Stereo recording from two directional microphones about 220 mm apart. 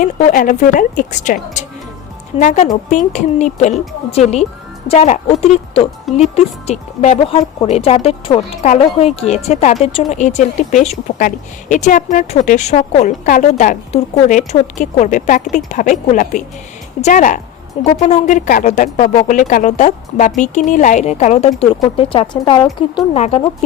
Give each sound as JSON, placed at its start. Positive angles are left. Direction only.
{"t": 0.0, "sound": "speech", "side_deg": 35}
{"t": 23.1, "sound": "speech", "side_deg": 30}